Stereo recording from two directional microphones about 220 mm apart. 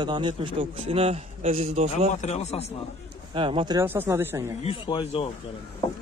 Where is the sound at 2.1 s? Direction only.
30° left (ahead or behind).